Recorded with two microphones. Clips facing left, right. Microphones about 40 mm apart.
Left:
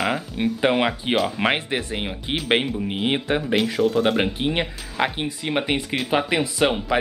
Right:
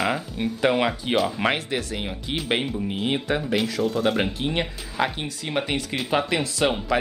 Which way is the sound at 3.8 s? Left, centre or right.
Centre.